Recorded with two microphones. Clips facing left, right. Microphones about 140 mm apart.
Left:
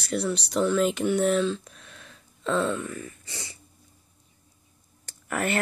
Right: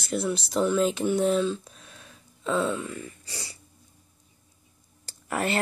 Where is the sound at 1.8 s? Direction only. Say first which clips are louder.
Even; 10° right (ahead or behind).